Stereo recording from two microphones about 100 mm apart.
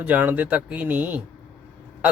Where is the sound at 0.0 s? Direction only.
15° right (ahead or behind).